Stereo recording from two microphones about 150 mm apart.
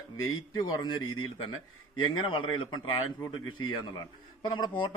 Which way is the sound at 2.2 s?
35° left (ahead or behind).